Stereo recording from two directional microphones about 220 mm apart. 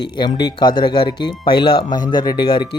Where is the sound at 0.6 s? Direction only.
20° left (ahead or behind).